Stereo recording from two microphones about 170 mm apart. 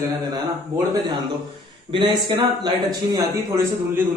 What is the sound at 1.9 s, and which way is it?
Speech, 25° right (ahead or behind).